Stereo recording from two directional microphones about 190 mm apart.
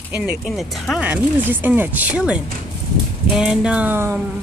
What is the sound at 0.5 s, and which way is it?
Speech, centre (ahead or behind).